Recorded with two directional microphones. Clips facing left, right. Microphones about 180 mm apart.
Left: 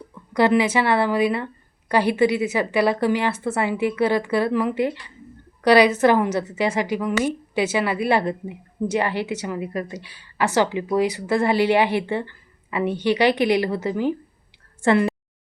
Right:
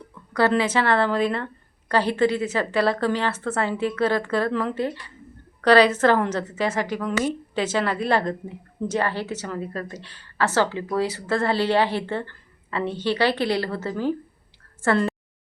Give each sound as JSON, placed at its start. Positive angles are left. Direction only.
{"t": 0.1, "sound": "a woman's voice", "side_deg": 15}